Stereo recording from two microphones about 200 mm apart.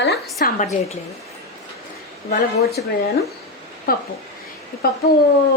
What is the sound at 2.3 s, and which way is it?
Speech, 50° left (ahead or behind).